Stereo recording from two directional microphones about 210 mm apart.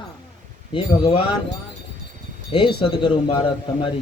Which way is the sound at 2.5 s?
25° left (ahead or behind).